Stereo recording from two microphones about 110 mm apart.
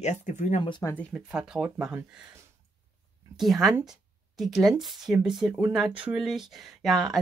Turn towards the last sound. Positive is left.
turn(degrees=0)  # may be behind; listen again after turning